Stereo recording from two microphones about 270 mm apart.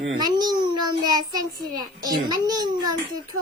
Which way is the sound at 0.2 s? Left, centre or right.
Centre.